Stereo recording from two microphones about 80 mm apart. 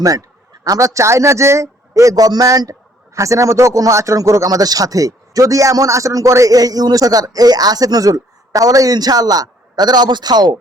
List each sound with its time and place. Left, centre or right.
0.0 s speech: right